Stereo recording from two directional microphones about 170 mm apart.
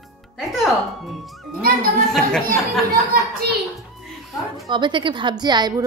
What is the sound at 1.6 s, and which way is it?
Speech, 60° right (ahead or behind).